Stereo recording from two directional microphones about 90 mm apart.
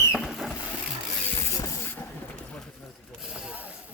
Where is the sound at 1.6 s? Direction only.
35° left (ahead or behind).